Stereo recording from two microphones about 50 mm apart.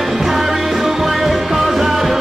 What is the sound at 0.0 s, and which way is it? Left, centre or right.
Music, centre.